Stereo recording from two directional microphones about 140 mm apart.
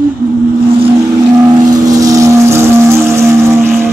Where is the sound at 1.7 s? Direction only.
25° right (ahead or behind).